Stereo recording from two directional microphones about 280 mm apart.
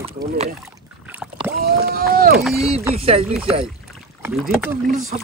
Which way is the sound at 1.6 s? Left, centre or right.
Right.